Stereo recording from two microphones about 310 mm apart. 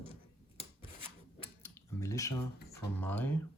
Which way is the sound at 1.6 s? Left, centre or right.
Centre.